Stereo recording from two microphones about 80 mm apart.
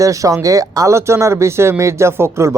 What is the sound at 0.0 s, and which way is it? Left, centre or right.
A man's voice, right.